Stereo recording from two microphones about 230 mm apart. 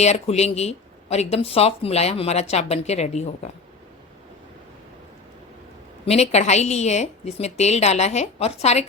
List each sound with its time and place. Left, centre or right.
0.0 s speech: left
6.1 s speech: left